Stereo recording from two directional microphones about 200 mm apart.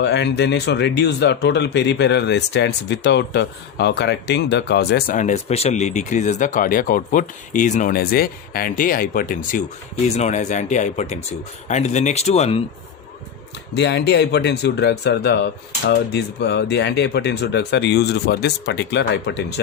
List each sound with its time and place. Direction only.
0.0 s speech: 60° left (ahead or behind); by 12.6 s 30° left (ahead or behind)
13.7 s speech: 60° left (ahead or behind)